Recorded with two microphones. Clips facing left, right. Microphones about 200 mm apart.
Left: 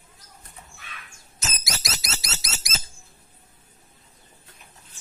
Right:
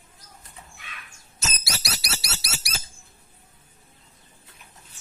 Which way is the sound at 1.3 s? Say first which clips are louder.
Even; 20° left (ahead or behind).